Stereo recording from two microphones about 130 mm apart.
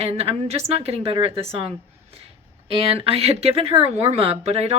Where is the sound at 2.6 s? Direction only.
50° right (ahead or behind).